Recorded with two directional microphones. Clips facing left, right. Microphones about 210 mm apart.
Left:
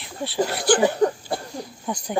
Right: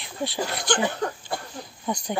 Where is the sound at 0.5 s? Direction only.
5° left (ahead or behind).